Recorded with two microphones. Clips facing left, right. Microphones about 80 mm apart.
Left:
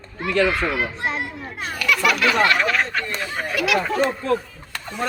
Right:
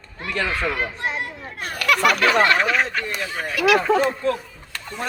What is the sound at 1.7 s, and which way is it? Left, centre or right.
Speech, right.